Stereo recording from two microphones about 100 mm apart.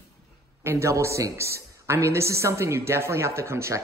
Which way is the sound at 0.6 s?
25° right (ahead or behind).